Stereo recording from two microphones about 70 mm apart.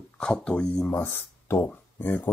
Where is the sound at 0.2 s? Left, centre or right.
Centre.